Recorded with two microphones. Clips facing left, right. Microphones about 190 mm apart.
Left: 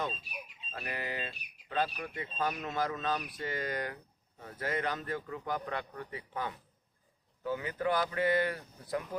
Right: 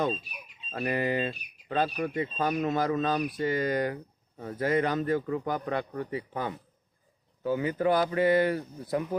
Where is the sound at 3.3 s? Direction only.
15° right (ahead or behind).